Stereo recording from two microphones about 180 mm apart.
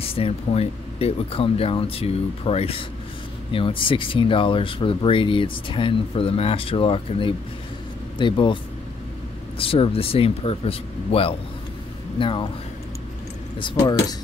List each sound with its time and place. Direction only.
0.0 s speech: 30° left (ahead or behind)
9.6 s speech: 30° left (ahead or behind)
13.6 s speech: 25° left (ahead or behind)